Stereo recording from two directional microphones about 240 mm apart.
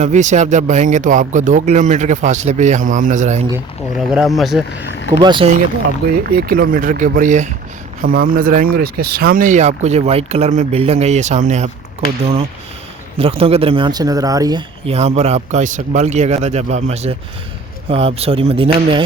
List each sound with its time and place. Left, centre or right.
0.0 s speech: right
3.9 s speech: centre
5.2 s speech: right
6.2 s speech: right
13.1 s speech: right